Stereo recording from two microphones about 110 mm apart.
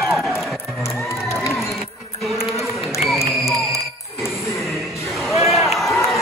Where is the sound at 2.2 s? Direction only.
Centre (ahead or behind).